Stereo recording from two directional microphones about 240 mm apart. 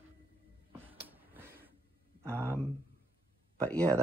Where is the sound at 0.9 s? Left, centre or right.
Centre.